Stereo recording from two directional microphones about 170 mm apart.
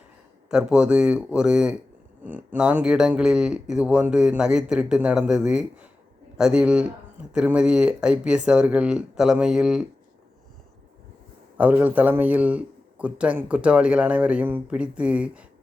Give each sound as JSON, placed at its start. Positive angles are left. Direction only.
{"t": 0.4, "sound": "speech", "side_deg": -5}
{"t": 11.5, "sound": "speech", "side_deg": -10}